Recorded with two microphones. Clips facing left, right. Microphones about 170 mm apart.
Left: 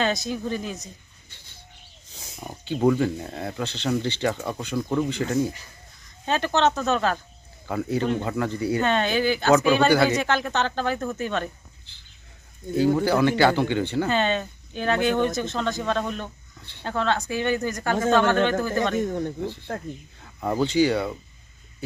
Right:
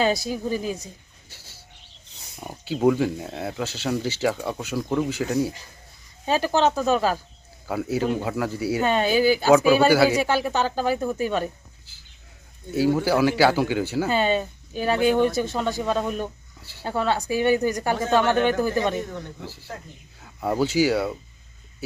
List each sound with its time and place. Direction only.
0.0 s speech: 10° right (ahead or behind)
1.3 s bird: 5° right (ahead or behind)
2.4 s speech: 5° right (ahead or behind)
12.7 s speech: 5° right (ahead or behind)
19.7 s speech: 55° left (ahead or behind)
20.1 s speech: 5° right (ahead or behind)